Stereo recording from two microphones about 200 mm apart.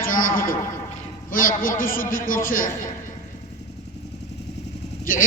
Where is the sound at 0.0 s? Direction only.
45° left (ahead or behind).